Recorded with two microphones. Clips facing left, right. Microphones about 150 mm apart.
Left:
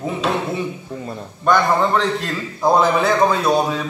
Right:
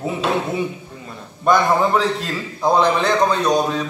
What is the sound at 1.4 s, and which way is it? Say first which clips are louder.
A man's voice: even; 10° right (ahead or behind).